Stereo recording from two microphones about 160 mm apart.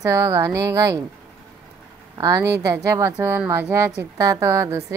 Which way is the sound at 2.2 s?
25° right (ahead or behind).